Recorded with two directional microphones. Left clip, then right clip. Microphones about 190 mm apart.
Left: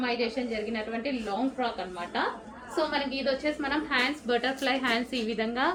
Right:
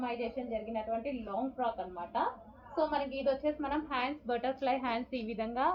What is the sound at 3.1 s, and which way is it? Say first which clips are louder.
A woman's voice: left 3 dB; 20° left (ahead or behind).